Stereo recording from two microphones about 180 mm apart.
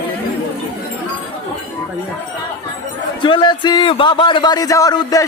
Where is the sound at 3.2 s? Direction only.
25° left (ahead or behind).